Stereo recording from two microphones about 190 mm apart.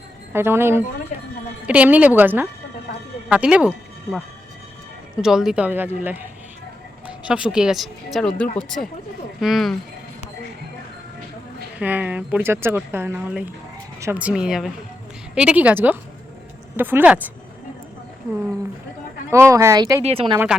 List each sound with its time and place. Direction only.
0.3 s speech: 10° right (ahead or behind)
5.2 s speech: 5° right (ahead or behind)
7.3 s speech: 5° right (ahead or behind)
11.8 s speech: 10° right (ahead or behind)
19.3 s speech: 15° right (ahead or behind)
20.0 s a woman's voice: 30° right (ahead or behind)